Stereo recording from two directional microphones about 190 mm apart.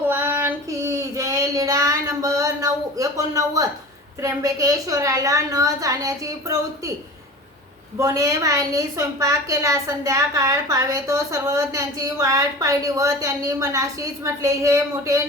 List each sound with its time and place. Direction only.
0.1 s child singing: 10° right (ahead or behind)
4.2 s a woman's voice: 15° right (ahead or behind)
7.9 s a woman's voice: 20° right (ahead or behind)